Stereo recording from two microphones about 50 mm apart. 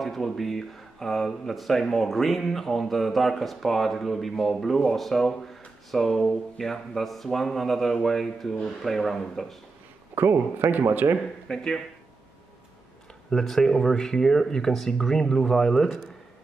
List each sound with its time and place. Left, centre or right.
0.0 s speech: centre
10.1 s speech: right
11.1 s speech: centre
13.3 s speech: centre